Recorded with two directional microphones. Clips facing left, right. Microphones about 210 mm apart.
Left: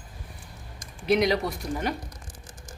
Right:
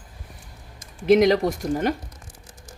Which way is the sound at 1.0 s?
50° right (ahead or behind).